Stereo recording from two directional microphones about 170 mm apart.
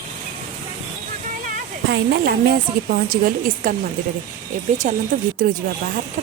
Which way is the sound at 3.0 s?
55° right (ahead or behind).